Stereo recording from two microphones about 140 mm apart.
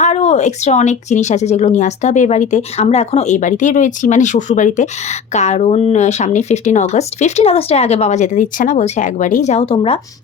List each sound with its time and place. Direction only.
0.0 s speech: 55° left (ahead or behind)
9.7 s a woman's voice: 40° left (ahead or behind)